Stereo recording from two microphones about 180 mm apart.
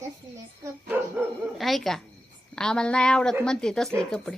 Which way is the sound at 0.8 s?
10° right (ahead or behind).